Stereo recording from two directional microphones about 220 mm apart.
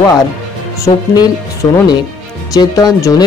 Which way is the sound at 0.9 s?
20° left (ahead or behind).